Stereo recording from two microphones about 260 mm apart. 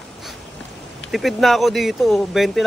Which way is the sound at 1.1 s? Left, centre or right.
Centre.